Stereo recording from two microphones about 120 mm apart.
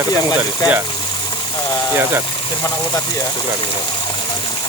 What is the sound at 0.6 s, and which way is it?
Speech, 35° left (ahead or behind).